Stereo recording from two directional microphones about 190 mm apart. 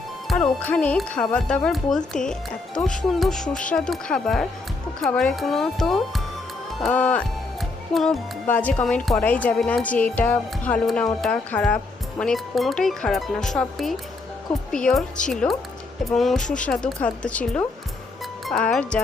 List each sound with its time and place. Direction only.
0.3 s speech: 5° left (ahead or behind)